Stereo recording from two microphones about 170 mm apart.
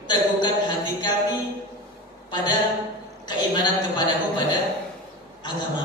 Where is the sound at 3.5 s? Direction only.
25° left (ahead or behind).